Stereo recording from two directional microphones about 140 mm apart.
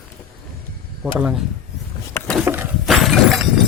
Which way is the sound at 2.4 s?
15° right (ahead or behind).